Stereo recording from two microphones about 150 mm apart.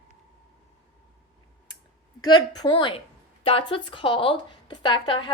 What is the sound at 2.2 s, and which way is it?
A woman's voice, 25° left (ahead or behind).